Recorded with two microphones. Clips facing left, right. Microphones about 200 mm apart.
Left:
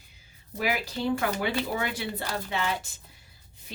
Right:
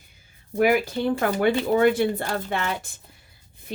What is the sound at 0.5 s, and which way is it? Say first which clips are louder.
A woman's voice: right 9 dB; 55° right (ahead or behind).